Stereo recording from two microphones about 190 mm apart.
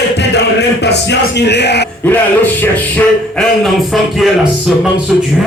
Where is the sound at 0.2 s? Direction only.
60° left (ahead or behind).